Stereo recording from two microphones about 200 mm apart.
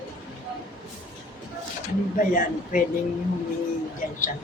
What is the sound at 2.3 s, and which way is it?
Speech, 45° left (ahead or behind).